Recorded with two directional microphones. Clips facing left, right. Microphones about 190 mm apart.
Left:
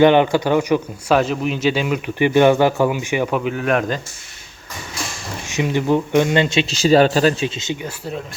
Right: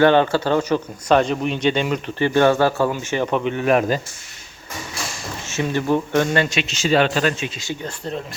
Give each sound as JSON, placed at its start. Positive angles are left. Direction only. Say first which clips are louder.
{"t": 0.0, "sound": "speech", "louder": "left 2 dB", "side_deg": 15}
{"t": 5.5, "sound": "a man's voice", "louder": "left 2 dB", "side_deg": 15}
{"t": 7.9, "sound": "speech", "louder": "even", "side_deg": 5}